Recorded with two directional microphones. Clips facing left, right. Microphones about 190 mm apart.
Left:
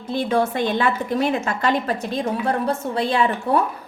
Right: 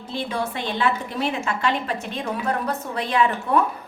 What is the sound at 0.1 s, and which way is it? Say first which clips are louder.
A woman's voice: left 7 dB; 45° left (ahead or behind).